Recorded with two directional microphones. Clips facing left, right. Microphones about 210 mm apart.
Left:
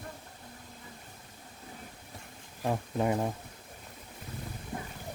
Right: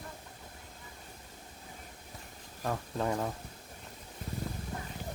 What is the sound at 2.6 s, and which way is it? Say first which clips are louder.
Speech: left 4 dB; 15° left (ahead or behind).